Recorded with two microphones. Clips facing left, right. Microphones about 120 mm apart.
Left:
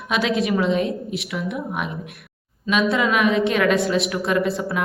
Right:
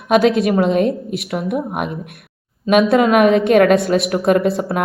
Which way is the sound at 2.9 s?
50° right (ahead or behind).